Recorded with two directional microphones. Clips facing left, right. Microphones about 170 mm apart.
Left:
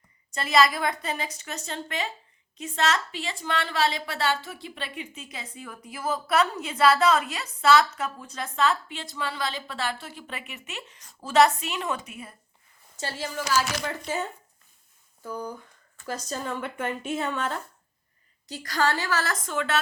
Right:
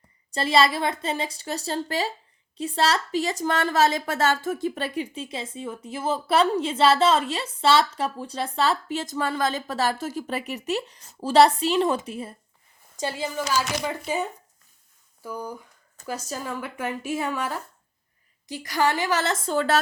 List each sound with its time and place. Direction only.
0.3 s a woman's voice: 30° right (ahead or behind)
13.0 s a woman's voice: 15° right (ahead or behind)
15.2 s a woman's voice: 10° right (ahead or behind); by 19.8 s 35° right (ahead or behind)